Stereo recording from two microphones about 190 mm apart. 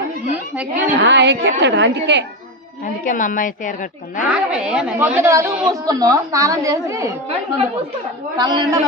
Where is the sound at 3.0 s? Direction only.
45° left (ahead or behind).